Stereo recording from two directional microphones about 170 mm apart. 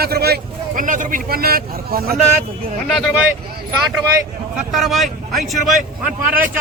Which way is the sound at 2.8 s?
Centre (ahead or behind).